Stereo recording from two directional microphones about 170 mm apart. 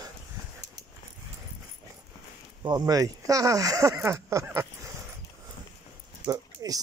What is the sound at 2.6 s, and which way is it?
Speech, 25° right (ahead or behind).